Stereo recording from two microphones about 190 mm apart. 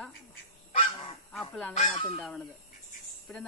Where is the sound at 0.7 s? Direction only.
30° left (ahead or behind).